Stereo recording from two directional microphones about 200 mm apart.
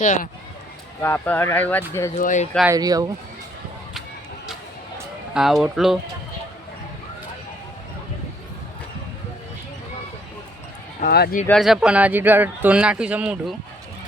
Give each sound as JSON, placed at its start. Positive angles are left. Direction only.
{"t": 0.0, "sound": "speech", "side_deg": 40}
{"t": 1.0, "sound": "speech", "side_deg": 10}
{"t": 2.1, "sound": "speech", "side_deg": 40}
{"t": 2.6, "sound": "speech", "side_deg": -20}
{"t": 5.3, "sound": "speech", "side_deg": 0}
{"t": 11.0, "sound": "speech", "side_deg": 50}
{"t": 11.4, "sound": "speech", "side_deg": 0}